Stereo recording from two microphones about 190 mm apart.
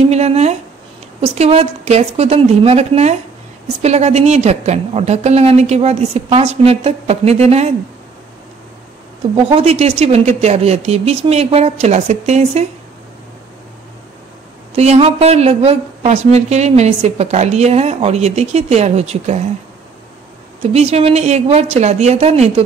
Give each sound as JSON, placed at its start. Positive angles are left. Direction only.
{"t": 0.1, "sound": "speech", "side_deg": -35}
{"t": 9.5, "sound": "speech", "side_deg": -35}
{"t": 14.8, "sound": "speech", "side_deg": -35}
{"t": 20.6, "sound": "speech", "side_deg": -35}